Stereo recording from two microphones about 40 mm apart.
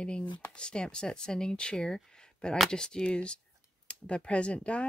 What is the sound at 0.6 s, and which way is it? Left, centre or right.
Speech, left.